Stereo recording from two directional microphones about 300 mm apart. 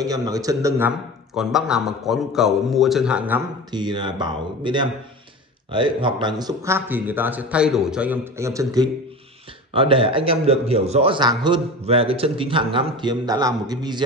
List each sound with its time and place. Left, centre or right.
0.0 s a man's voice: centre